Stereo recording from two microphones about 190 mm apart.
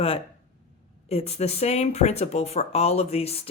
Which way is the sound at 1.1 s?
35° left (ahead or behind).